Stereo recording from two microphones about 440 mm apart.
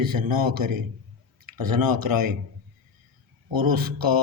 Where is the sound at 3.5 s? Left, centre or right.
Right.